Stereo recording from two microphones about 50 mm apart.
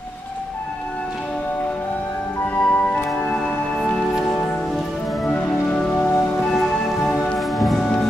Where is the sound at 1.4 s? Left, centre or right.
Left.